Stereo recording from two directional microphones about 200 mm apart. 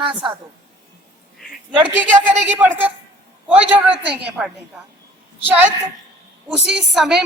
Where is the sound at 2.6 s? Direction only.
10° right (ahead or behind).